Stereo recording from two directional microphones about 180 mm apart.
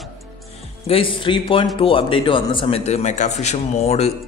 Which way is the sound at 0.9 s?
30° left (ahead or behind).